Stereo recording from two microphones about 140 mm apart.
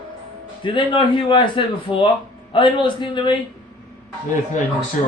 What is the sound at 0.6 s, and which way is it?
Speech, 35° left (ahead or behind).